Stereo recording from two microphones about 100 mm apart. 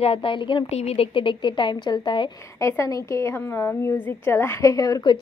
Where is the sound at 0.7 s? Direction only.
90° left; by 2.2 s 50° left (ahead or behind).